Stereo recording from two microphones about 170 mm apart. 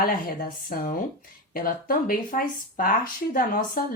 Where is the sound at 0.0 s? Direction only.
60° left (ahead or behind).